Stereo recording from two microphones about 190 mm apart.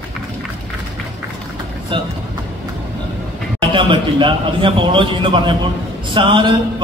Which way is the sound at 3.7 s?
25° right (ahead or behind).